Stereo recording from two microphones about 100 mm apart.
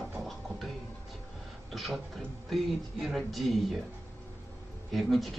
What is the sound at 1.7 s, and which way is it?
Speech, centre (ahead or behind).